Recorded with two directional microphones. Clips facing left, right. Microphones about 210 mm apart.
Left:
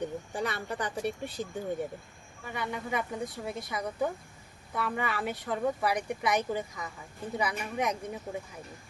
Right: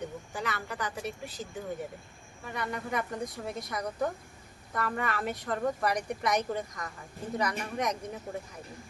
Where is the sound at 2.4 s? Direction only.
Centre (ahead or behind).